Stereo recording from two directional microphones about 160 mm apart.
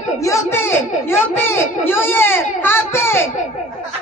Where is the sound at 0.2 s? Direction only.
20° left (ahead or behind).